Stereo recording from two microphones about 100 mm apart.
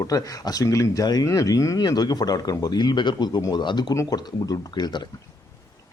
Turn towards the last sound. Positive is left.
turn(degrees=45)  # may be behind; listen again after turning